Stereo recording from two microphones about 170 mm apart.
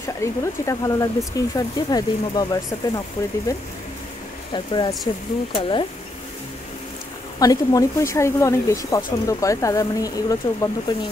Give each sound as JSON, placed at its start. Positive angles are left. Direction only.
{"t": 0.2, "sound": "speech", "side_deg": 20}
{"t": 4.7, "sound": "speech", "side_deg": 25}
{"t": 7.3, "sound": "speech", "side_deg": 20}